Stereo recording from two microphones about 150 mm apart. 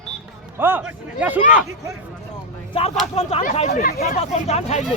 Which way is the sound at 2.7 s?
35° left (ahead or behind).